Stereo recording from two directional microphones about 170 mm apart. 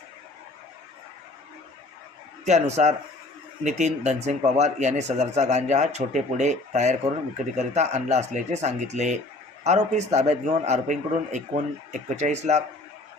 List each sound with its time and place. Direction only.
2.4 s a man's voice: 40° right (ahead or behind)